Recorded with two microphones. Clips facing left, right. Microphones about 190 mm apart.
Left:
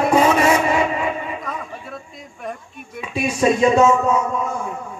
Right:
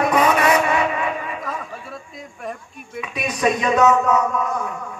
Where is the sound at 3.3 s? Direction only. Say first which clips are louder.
Left 3 dB; 25° left (ahead or behind).